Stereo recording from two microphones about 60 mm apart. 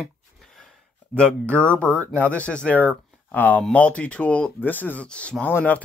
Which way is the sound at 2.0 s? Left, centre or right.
Left.